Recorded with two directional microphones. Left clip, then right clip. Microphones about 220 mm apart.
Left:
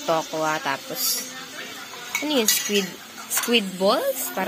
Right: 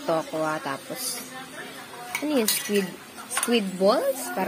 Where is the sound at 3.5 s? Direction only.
5° right (ahead or behind).